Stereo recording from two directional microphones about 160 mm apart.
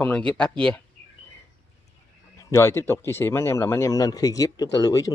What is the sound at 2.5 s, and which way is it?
Speech, 15° left (ahead or behind).